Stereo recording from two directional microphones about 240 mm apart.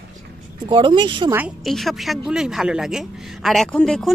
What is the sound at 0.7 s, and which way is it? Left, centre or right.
Speech, right.